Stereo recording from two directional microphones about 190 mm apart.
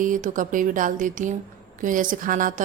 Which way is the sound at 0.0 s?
45° right (ahead or behind).